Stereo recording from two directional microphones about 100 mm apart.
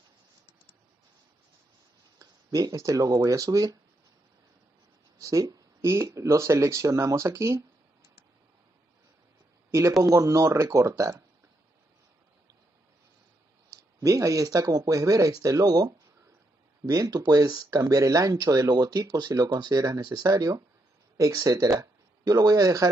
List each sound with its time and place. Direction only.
2.1 s speech: 35° right (ahead or behind)
5.2 s speech: 35° right (ahead or behind)
9.7 s speech: 30° right (ahead or behind)
13.7 s speech: 35° right (ahead or behind)